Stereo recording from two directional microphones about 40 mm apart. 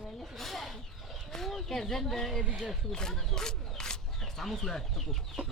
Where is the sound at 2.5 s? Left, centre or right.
Right.